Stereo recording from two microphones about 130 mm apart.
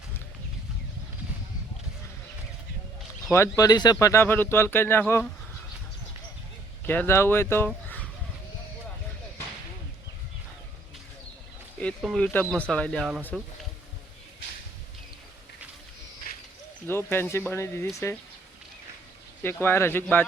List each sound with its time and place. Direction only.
3.3 s speech: 20° left (ahead or behind)
4.0 s speech: 20° left (ahead or behind)
6.8 s speech: 15° left (ahead or behind)
12.0 s speech: 5° left (ahead or behind)
16.8 s speech: 15° left (ahead or behind)
19.4 s speech: 15° left (ahead or behind)